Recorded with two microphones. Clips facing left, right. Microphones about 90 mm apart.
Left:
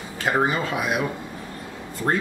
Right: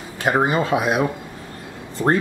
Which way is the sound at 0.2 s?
20° right (ahead or behind).